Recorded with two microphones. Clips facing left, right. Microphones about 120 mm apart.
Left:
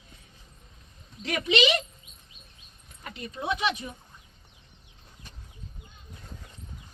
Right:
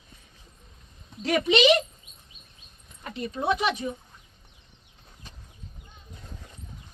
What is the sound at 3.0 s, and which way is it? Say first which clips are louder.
Speech: right 5 dB; 35° right (ahead or behind).